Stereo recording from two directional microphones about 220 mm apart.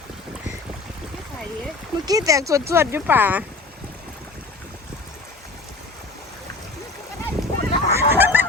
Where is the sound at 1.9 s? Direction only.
15° right (ahead or behind).